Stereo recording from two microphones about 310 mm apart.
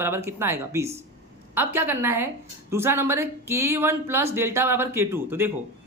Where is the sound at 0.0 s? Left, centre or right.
Centre.